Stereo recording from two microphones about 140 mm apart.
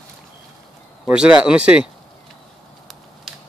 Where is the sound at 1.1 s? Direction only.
5° right (ahead or behind).